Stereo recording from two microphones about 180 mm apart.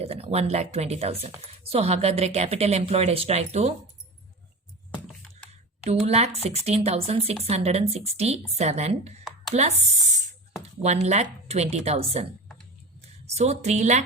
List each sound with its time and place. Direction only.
0.0 s speech: 35° right (ahead or behind)
5.8 s speech: 35° right (ahead or behind)
11.0 s a woman's voice: 40° right (ahead or behind)